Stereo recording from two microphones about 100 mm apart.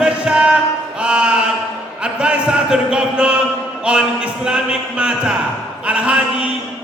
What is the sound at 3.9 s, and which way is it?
Music, 10° right (ahead or behind).